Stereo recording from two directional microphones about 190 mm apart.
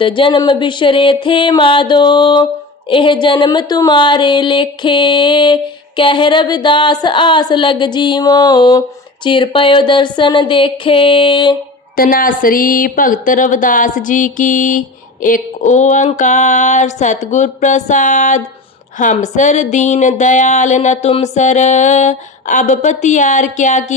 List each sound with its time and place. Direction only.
0.0 s speech: 25° left (ahead or behind)
11.9 s speech: 50° left (ahead or behind)
19.1 s a sound: 40° left (ahead or behind)